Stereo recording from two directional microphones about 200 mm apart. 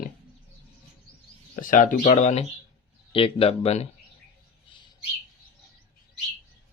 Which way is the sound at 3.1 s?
25° left (ahead or behind).